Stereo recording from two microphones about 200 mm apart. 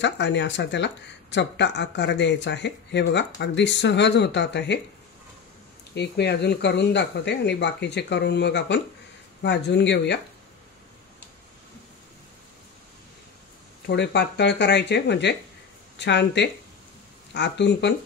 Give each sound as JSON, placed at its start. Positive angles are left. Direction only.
{"t": 0.0, "sound": "speech", "side_deg": 60}
{"t": 5.9, "sound": "speech", "side_deg": 55}
{"t": 13.8, "sound": "speech", "side_deg": 55}